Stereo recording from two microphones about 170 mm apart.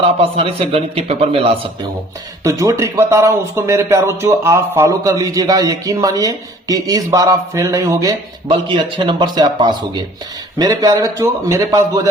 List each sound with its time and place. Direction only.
0.2 s a man's voice: 35° right (ahead or behind)
2.4 s speech: 20° right (ahead or behind)
8.4 s speech: 30° right (ahead or behind)